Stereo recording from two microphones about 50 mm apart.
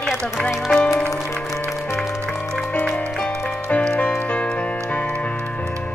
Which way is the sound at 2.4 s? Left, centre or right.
Centre.